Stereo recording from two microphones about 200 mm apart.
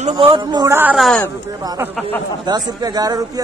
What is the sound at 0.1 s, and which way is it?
Speech, 25° right (ahead or behind).